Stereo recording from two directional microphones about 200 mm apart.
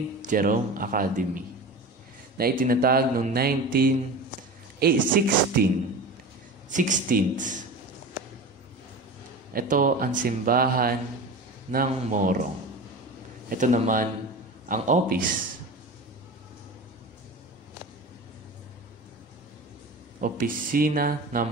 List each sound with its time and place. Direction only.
0.2 s speech: 40° right (ahead or behind)
6.7 s speech: 40° right (ahead or behind)
9.5 s speech: 45° right (ahead or behind)
13.5 s speech: 40° right (ahead or behind)
20.2 s speech: 45° right (ahead or behind)